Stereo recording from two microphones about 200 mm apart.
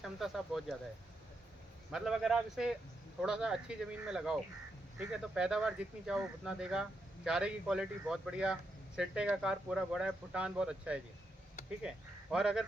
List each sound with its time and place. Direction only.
0.0 s speech: centre (ahead or behind)
1.9 s speech: centre (ahead or behind)